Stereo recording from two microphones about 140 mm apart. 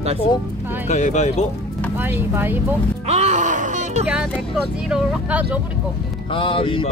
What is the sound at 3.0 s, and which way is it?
Speech, 50° right (ahead or behind).